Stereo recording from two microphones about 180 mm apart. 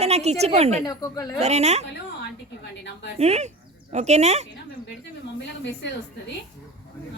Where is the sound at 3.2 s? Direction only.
35° right (ahead or behind).